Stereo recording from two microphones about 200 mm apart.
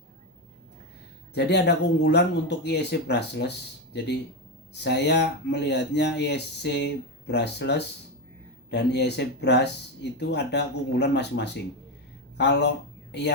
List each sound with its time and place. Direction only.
1.3 s speech: 60° left (ahead or behind)